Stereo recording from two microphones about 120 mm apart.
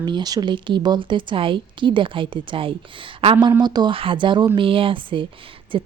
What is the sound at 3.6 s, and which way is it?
Speech, 35° right (ahead or behind).